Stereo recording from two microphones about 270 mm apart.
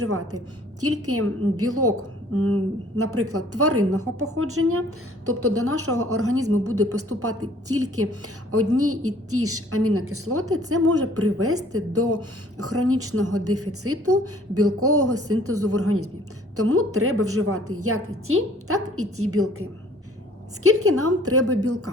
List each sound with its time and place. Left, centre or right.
0.0 s a woman's voice: right
20.7 s a woman's voice: right